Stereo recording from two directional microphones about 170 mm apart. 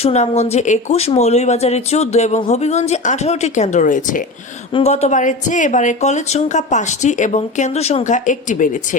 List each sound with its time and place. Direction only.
0.0 s speech: 40° left (ahead or behind)
4.7 s speech: 40° left (ahead or behind)